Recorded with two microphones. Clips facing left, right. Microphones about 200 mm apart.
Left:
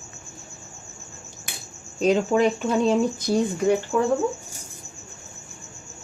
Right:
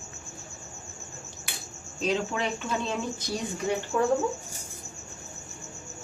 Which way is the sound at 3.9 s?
50° left (ahead or behind).